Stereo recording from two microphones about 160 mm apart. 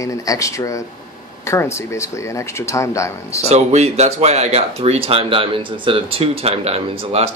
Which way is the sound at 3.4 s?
45° right (ahead or behind).